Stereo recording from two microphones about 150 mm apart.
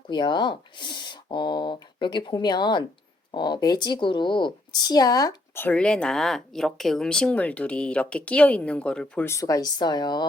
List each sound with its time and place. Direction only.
0.1 s speech: 30° left (ahead or behind)
5.5 s speech: 10° left (ahead or behind); by 10.2 s 30° left (ahead or behind)